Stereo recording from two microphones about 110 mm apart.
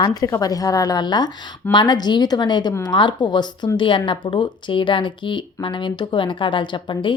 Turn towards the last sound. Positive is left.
turn(degrees=45)  # may be behind; listen again after turning